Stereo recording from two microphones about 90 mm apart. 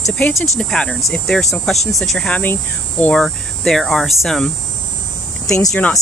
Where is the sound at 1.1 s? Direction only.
5° left (ahead or behind).